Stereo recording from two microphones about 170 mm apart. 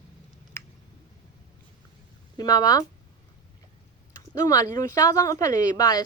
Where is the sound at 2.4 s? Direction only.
20° left (ahead or behind).